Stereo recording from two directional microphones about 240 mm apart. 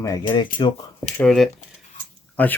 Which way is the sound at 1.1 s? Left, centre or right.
Centre.